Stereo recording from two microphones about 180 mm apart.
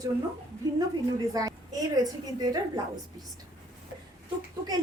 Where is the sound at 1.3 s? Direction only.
20° right (ahead or behind).